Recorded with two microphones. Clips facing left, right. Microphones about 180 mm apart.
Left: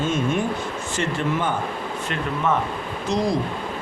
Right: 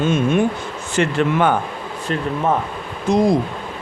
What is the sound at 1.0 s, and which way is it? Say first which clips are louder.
Speech: right 7 dB; 65° right (ahead or behind).